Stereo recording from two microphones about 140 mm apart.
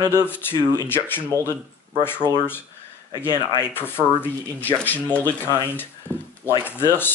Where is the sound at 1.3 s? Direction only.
20° right (ahead or behind).